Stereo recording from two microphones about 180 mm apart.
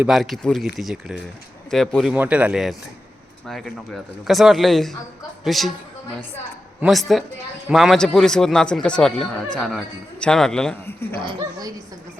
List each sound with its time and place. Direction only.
0.0 s a man's voice: centre (ahead or behind)
6.8 s a man's voice: centre (ahead or behind)
11.2 s speech: 25° right (ahead or behind)